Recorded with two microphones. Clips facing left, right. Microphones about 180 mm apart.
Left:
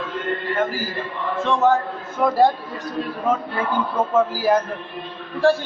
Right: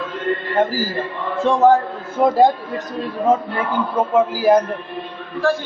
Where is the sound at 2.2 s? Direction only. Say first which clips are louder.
Right 4 dB; 30° right (ahead or behind).